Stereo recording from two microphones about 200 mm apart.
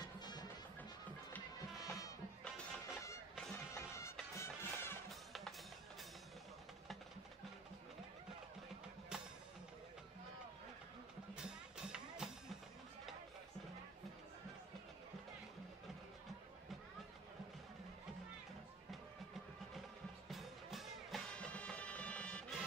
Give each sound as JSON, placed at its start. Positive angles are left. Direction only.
{"t": 0.0, "sound": "music", "side_deg": 20}
{"t": 2.4, "sound": "music", "side_deg": 5}
{"t": 9.1, "sound": "music", "side_deg": -5}
{"t": 11.3, "sound": "music", "side_deg": -5}
{"t": 20.2, "sound": "music", "side_deg": 0}